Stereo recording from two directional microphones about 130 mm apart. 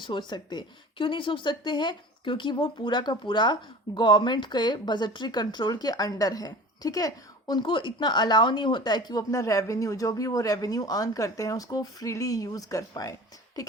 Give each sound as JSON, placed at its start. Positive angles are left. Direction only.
{"t": 0.0, "sound": "speech", "side_deg": 35}